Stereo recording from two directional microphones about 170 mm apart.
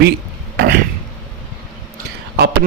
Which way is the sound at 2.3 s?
75° right (ahead or behind).